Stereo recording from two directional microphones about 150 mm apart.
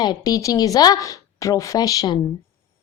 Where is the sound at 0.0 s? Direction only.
25° left (ahead or behind).